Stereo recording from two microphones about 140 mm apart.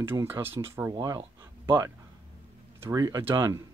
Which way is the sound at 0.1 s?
15° right (ahead or behind).